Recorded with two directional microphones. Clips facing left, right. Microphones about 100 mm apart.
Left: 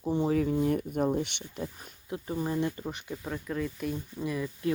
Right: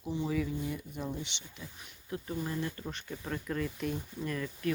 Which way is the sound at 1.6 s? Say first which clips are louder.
Left 13 dB; 40° left (ahead or behind).